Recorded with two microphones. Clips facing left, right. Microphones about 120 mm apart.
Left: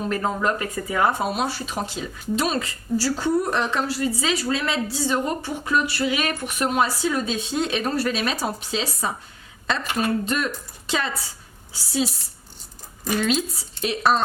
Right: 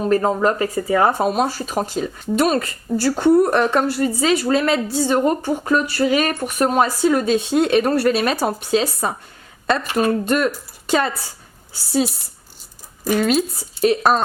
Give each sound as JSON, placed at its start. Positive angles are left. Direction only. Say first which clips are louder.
{"t": 0.0, "sound": "speech", "louder": "right 7 dB", "side_deg": -40}
{"t": 13.8, "sound": "speech", "louder": "right 5 dB", "side_deg": -45}